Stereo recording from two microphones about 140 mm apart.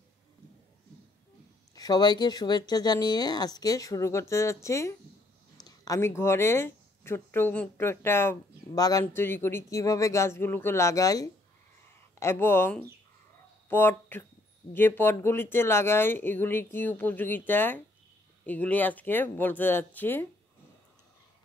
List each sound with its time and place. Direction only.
1.8 s speech: 30° left (ahead or behind); by 20.2 s 15° left (ahead or behind)